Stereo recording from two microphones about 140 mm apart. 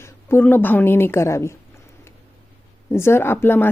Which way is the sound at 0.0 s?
15° left (ahead or behind).